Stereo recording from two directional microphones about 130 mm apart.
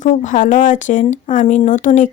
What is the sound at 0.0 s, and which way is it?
A woman's voice, 70° left (ahead or behind).